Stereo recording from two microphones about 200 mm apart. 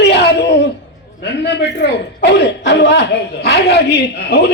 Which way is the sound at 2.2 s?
60° left (ahead or behind).